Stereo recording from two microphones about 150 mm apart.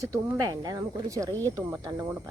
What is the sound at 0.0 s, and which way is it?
Speech, 20° right (ahead or behind).